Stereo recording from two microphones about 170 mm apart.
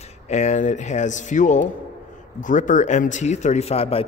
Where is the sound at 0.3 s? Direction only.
45° left (ahead or behind).